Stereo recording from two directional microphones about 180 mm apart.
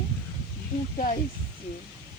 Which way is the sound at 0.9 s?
45° left (ahead or behind).